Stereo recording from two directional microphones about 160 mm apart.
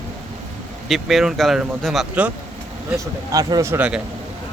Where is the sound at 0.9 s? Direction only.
Centre (ahead or behind).